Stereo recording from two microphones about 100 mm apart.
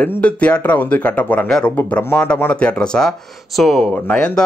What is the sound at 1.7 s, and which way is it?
Speech, 20° left (ahead or behind).